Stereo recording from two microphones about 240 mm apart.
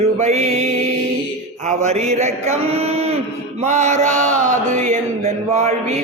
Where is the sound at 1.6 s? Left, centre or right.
Right.